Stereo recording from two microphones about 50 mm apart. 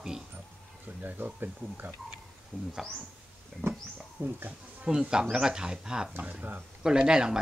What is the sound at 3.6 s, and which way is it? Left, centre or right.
Speech, right.